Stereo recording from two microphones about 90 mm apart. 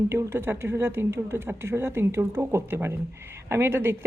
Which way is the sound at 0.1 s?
25° right (ahead or behind).